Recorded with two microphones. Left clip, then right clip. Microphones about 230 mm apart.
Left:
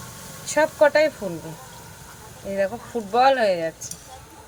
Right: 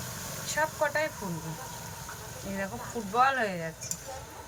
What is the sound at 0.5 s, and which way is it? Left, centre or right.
Speech, left.